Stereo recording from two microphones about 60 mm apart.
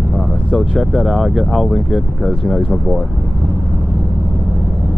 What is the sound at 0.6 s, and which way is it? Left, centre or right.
Speech, centre.